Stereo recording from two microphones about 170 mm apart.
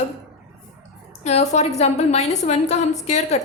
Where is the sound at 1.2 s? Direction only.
40° left (ahead or behind).